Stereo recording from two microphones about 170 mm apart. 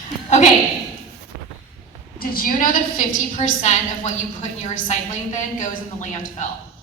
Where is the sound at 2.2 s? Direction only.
55° left (ahead or behind).